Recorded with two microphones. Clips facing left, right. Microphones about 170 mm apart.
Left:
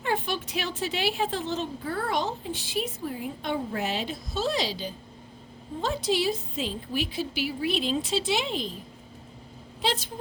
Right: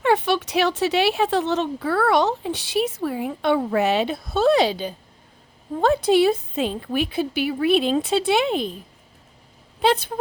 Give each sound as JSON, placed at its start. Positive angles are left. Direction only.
{"t": 0.0, "sound": "a woman's voice", "side_deg": -75}
{"t": 9.8, "sound": "a woman's voice", "side_deg": -60}